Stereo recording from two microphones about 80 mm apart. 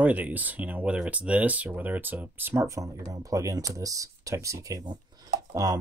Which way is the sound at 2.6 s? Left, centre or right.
Right.